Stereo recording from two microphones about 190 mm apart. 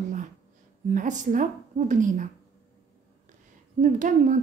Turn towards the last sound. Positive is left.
turn(degrees=-40)  # may be behind; listen again after turning